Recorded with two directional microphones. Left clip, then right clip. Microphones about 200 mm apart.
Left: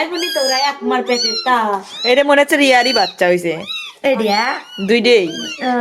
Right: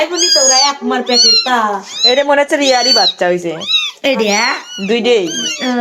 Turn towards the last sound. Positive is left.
turn(degrees=20)  # may be behind; listen again after turning